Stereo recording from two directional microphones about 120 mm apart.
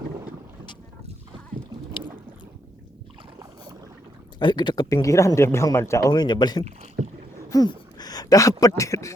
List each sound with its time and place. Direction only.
4.4 s speech: 40° left (ahead or behind)